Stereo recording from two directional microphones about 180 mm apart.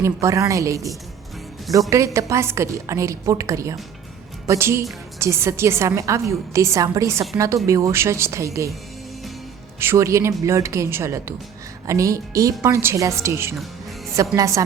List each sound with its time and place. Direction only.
0.0 s a woman's voice: 15° right (ahead or behind)
1.7 s a woman's voice: centre (ahead or behind)
2.1 s a woman's voice: 15° right (ahead or behind)
9.8 s a woman's voice: 15° right (ahead or behind)